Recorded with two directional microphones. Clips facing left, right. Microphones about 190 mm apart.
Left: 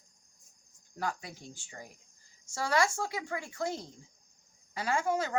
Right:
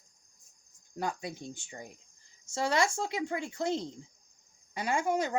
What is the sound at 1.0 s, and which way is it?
Speech, 20° right (ahead or behind).